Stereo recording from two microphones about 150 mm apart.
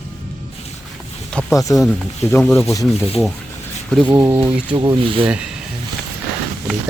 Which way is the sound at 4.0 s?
30° right (ahead or behind).